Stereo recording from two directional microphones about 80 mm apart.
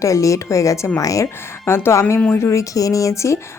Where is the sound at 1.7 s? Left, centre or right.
Left.